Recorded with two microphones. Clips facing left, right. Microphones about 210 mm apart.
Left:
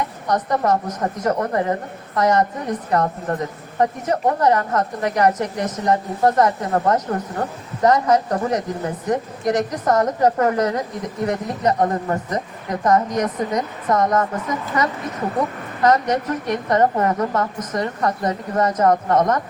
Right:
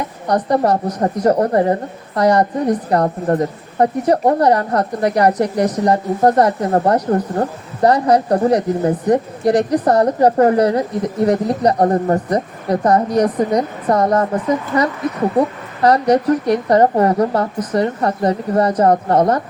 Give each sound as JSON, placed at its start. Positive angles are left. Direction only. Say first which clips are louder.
{"t": 0.3, "sound": "a woman's voice", "louder": "right 4 dB", "side_deg": -35}